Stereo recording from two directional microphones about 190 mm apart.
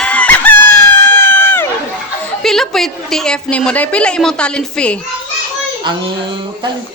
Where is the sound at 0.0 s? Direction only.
5° left (ahead or behind).